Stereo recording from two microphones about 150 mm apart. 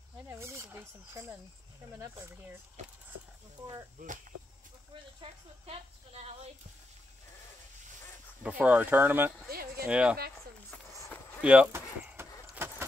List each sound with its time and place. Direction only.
0.3 s wild animals: 20° right (ahead or behind)
4.0 s speech: 55° right (ahead or behind)
5.2 s a woman's voice: 40° right (ahead or behind)
8.4 s speech: 10° right (ahead or behind)
9.5 s speech: 90° right
9.8 s speech: 10° right (ahead or behind)
11.4 s speech: 10° right (ahead or behind)
12.2 s vehicle: 15° right (ahead or behind)